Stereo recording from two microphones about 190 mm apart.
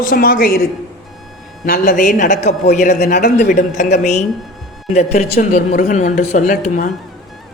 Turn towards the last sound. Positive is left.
turn(degrees=45)  # may be behind; listen again after turning